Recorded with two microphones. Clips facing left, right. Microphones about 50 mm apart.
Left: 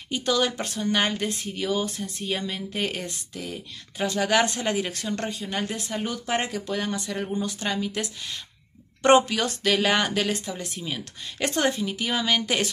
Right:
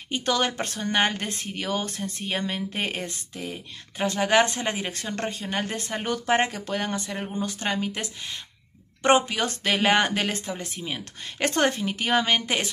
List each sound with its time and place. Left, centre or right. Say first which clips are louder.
0.1 s speech: left 1 dB; right
9.0 s speech: left 2 dB; right
12.4 s speech: left 1 dB; right